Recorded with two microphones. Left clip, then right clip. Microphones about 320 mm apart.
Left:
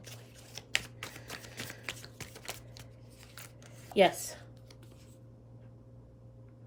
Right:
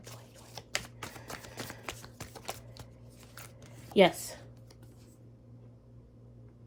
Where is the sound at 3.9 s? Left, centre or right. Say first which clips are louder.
Right 2 dB; centre.